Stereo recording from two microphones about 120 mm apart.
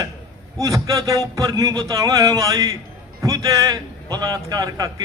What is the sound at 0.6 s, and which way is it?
A man's voice, 30° right (ahead or behind).